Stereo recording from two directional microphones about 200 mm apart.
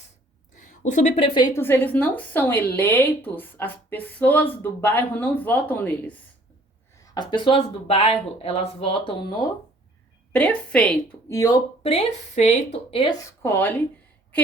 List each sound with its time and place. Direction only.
0.5 s a woman's voice: 40° left (ahead or behind); by 6.1 s 10° left (ahead or behind)
7.1 s speech: 20° left (ahead or behind)
10.3 s a woman's voice: 5° left (ahead or behind)
11.8 s speech: 30° left (ahead or behind); by 13.8 s 10° left (ahead or behind)